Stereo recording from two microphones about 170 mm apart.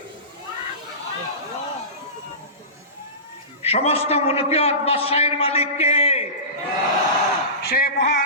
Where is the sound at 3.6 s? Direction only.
35° left (ahead or behind).